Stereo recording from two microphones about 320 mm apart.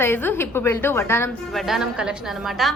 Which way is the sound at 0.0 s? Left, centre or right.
Centre.